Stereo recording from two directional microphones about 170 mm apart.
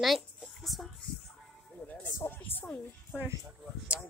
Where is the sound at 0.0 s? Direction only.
Centre (ahead or behind).